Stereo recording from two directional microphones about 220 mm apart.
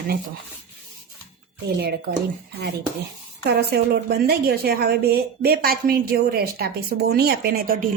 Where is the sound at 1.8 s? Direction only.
45° right (ahead or behind).